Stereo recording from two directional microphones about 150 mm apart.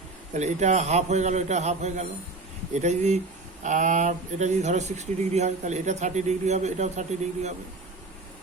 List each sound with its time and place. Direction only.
0.3 s speech: 50° right (ahead or behind)